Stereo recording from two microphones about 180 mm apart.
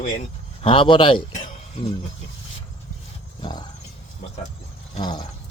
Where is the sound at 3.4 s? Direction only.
25° left (ahead or behind).